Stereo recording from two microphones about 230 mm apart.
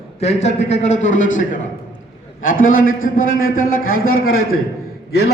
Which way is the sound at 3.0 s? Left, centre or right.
Left.